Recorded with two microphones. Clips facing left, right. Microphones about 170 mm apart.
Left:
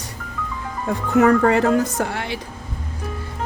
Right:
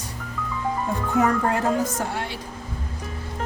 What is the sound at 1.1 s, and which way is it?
Speech, 80° left.